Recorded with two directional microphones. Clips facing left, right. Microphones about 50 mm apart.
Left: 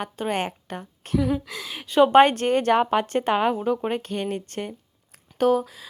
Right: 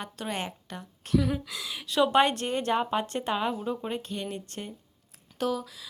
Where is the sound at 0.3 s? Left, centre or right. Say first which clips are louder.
Left 7 dB; left.